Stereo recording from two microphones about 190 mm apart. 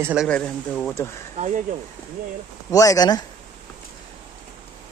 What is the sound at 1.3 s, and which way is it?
Speech, 40° right (ahead or behind).